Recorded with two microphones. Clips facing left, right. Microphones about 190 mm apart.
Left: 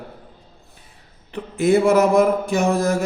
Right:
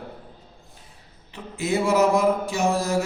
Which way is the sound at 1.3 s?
60° left (ahead or behind).